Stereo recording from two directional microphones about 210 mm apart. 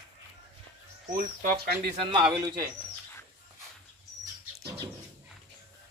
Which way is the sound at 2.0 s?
25° right (ahead or behind).